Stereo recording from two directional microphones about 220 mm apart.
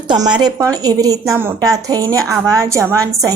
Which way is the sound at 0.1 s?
20° right (ahead or behind).